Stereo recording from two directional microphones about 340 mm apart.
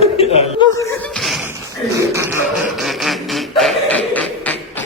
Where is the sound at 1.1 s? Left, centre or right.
Centre.